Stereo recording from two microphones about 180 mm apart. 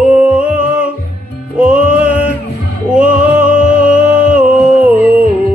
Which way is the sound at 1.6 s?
10° right (ahead or behind).